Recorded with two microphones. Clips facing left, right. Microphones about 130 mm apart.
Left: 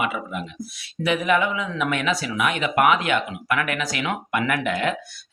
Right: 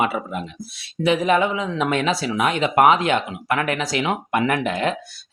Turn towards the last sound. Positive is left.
turn(degrees=-30)  # may be behind; listen again after turning